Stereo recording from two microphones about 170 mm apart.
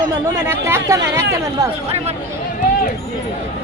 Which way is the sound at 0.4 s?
15° right (ahead or behind).